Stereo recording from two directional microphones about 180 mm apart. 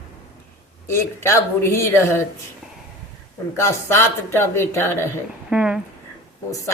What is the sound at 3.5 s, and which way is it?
Speech, 15° left (ahead or behind).